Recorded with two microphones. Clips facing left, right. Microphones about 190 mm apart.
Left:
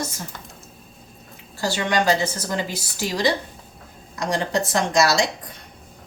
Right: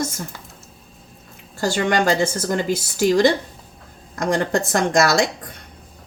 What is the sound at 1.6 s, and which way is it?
A woman's voice, 50° right (ahead or behind).